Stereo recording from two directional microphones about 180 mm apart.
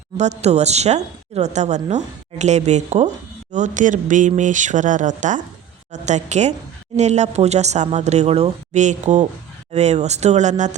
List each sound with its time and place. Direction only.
0.2 s a woman's voice: 40° right (ahead or behind)